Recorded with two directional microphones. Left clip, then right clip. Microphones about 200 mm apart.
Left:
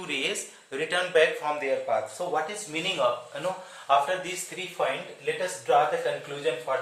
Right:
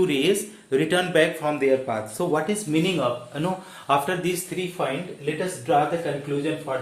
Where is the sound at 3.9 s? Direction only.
55° right (ahead or behind).